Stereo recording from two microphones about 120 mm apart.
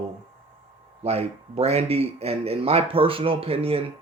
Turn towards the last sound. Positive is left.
turn(degrees=-55)  # may be behind; listen again after turning